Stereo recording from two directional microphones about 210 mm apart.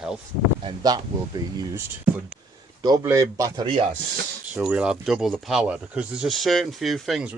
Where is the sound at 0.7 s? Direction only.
20° right (ahead or behind).